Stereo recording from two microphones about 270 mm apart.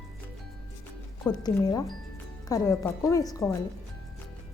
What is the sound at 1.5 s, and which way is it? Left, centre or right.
A woman's voice, centre.